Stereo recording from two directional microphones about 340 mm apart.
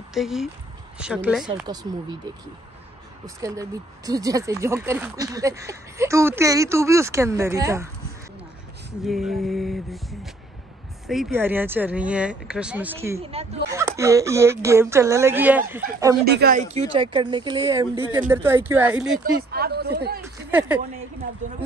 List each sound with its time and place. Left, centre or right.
0.1 s speech: centre
3.3 s speech: centre
9.0 s speech: centre
16.3 s speech: right; by 19.2 s centre
19.2 s speech: right
20.5 s speech: centre